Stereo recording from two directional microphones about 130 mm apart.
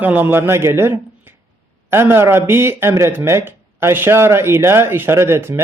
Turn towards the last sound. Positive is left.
turn(degrees=-20)  # may be behind; listen again after turning